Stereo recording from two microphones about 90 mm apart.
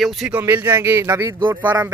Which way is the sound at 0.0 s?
Centre (ahead or behind).